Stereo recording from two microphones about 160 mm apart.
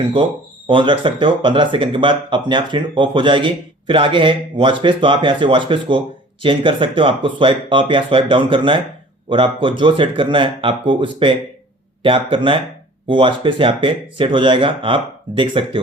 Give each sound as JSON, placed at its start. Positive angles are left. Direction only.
{"t": 0.0, "sound": "speech", "side_deg": -30}